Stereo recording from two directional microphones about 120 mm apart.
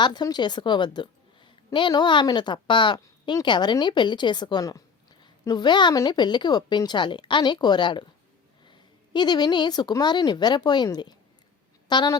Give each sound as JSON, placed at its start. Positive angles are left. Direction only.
{"t": 0.0, "sound": "a woman's voice", "side_deg": 35}